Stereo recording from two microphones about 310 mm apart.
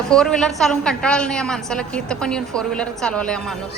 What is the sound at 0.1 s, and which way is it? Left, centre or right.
A woman's voice, centre.